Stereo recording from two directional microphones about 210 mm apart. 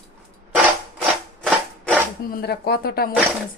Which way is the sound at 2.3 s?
50° left (ahead or behind).